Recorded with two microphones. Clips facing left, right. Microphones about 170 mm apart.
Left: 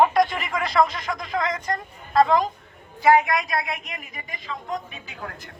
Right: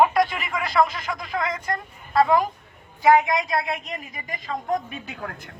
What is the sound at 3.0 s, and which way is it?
A woman's voice, 20° right (ahead or behind).